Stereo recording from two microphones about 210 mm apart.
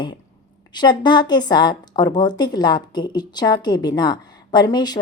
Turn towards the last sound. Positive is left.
turn(degrees=20)  # may be behind; listen again after turning